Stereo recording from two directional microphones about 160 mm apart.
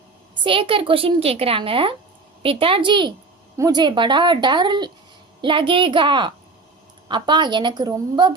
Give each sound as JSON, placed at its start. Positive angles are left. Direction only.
{"t": 0.4, "sound": "a woman's voice", "side_deg": -35}